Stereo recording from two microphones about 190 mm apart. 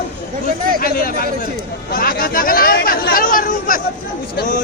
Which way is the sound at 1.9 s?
50° left (ahead or behind).